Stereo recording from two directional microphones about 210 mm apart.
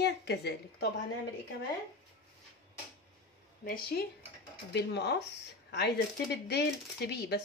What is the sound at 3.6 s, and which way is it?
Speech, 45° left (ahead or behind).